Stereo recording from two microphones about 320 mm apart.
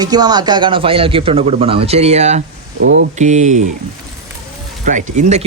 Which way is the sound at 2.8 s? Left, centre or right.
Right.